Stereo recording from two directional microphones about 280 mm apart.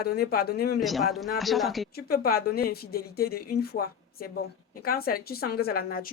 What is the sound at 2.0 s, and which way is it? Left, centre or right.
A woman's voice, left.